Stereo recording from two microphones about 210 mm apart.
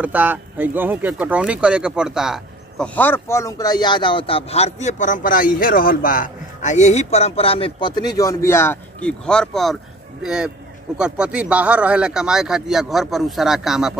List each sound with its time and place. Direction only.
0.0 s speech: 10° right (ahead or behind)